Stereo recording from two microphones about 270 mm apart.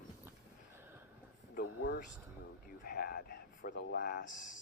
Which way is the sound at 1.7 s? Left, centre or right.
Left.